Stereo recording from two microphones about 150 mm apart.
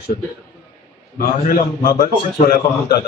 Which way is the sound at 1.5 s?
65° left (ahead or behind).